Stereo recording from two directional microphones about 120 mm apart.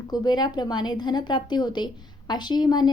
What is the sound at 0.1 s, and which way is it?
A woman's voice, 35° left (ahead or behind).